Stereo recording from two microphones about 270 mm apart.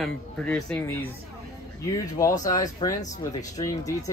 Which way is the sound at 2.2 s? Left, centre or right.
Centre.